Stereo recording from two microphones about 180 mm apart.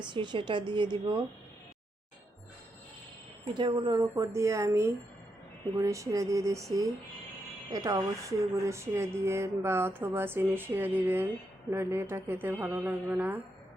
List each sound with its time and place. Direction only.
0.0 s speech: 25° right (ahead or behind)
3.5 s speech: 25° right (ahead or behind); by 13.4 s 10° right (ahead or behind)